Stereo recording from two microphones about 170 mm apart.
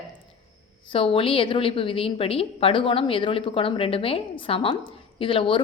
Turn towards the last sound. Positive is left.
turn(degrees=30)  # may be behind; listen again after turning